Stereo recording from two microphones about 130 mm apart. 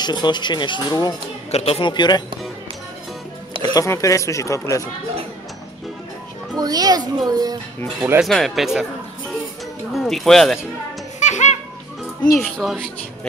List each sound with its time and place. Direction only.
0.0 s speech: 35° left (ahead or behind)
1.5 s speech: 50° left (ahead or behind); by 2.2 s 35° left (ahead or behind)
3.7 s speech: 25° left (ahead or behind)
6.5 s a child's voice: 30° right (ahead or behind)
8.2 s speech: centre (ahead or behind)
9.9 s speech: centre (ahead or behind)
11.1 s music: 65° left (ahead or behind)
12.4 s speech: centre (ahead or behind)